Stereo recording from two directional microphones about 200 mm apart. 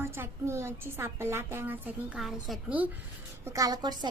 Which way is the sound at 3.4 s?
15° right (ahead or behind).